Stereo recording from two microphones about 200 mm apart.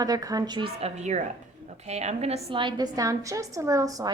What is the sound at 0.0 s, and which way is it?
A woman's voice, 20° right (ahead or behind).